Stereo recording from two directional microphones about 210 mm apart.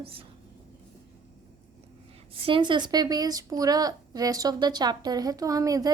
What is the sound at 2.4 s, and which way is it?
A woman's voice, 25° right (ahead or behind).